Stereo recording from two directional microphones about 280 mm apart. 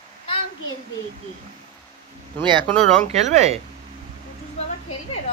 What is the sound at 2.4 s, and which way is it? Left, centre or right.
Speech, centre.